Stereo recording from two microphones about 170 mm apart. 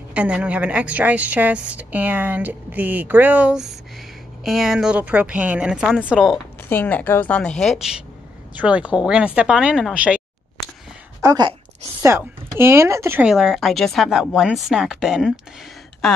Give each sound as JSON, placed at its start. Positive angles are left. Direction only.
{"t": 0.1, "sound": "a woman's voice", "side_deg": -5}
{"t": 6.3, "sound": "a woman's voice", "side_deg": 10}
{"t": 11.2, "sound": "speech", "side_deg": -25}
{"t": 12.0, "sound": "a woman's voice", "side_deg": -15}
{"t": 13.3, "sound": "speech", "side_deg": 0}